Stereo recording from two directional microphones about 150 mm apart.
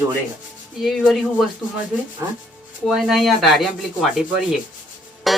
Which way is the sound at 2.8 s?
Centre (ahead or behind).